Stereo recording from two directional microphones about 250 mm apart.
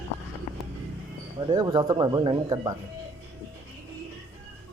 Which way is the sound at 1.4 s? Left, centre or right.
Centre.